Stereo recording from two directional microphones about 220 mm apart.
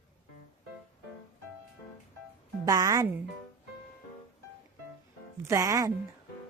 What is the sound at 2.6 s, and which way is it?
Speech, 15° right (ahead or behind).